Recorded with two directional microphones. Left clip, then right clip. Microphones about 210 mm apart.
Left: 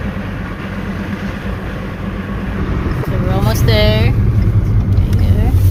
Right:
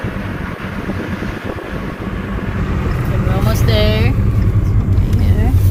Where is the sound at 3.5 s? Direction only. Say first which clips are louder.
Left 2 dB; 40° left (ahead or behind).